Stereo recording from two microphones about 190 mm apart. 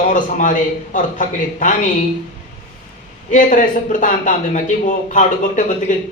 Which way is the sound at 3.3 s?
40° left (ahead or behind).